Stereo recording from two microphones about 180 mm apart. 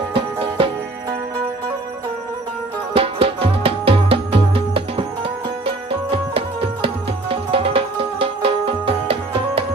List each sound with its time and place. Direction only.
0.1 s music: 30° right (ahead or behind)
2.9 s music: 30° right (ahead or behind)
5.7 s tabla: 30° right (ahead or behind)